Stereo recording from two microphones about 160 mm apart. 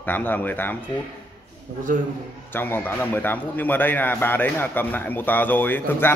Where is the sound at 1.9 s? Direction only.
55° right (ahead or behind).